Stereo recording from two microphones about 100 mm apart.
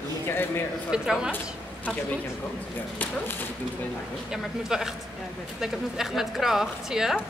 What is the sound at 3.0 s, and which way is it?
Speech, 20° left (ahead or behind).